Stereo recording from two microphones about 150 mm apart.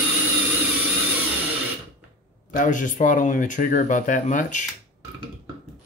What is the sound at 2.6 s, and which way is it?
Speech, 60° left (ahead or behind).